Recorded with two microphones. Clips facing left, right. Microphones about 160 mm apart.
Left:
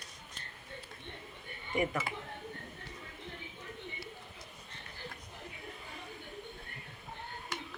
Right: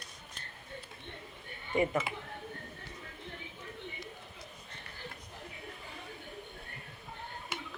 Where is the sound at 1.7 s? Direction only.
25° right (ahead or behind).